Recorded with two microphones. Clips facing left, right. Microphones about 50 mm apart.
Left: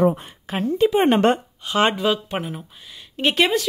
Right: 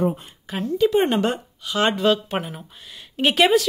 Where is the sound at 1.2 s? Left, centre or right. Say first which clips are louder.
Left 5 dB; left.